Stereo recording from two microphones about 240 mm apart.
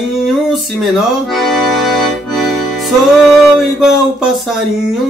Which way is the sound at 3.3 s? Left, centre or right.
Centre.